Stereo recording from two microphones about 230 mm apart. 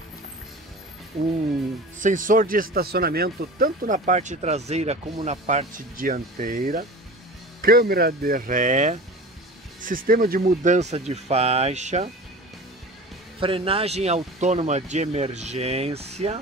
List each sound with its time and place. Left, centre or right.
2.0 s speech: right
13.4 s speech: right